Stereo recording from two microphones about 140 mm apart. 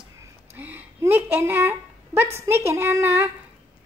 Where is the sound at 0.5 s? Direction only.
15° right (ahead or behind).